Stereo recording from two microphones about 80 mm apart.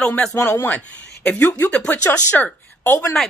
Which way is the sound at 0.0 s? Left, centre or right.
Centre.